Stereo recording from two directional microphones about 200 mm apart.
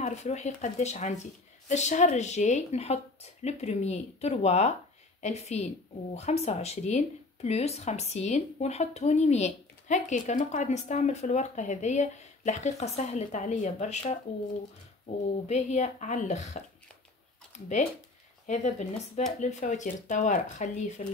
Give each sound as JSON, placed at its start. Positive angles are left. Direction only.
{"t": 0.0, "sound": "speech", "side_deg": 35}
{"t": 18.5, "sound": "speech", "side_deg": 35}